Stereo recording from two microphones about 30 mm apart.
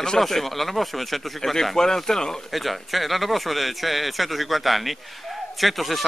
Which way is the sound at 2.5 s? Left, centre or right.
Centre.